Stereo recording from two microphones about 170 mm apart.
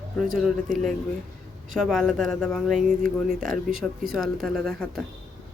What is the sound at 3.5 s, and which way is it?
Speech, 55° right (ahead or behind).